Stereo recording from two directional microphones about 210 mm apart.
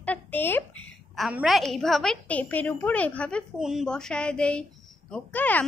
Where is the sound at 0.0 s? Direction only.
10° left (ahead or behind).